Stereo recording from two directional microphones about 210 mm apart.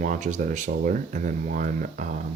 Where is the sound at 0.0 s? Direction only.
35° right (ahead or behind).